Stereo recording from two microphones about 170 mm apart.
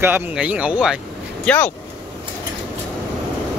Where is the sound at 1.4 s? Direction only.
10° left (ahead or behind).